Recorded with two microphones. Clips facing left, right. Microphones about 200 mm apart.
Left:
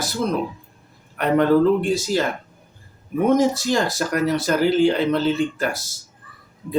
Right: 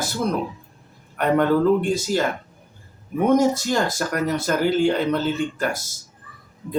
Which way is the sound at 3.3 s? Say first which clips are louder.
Right 1 dB; 50° right (ahead or behind).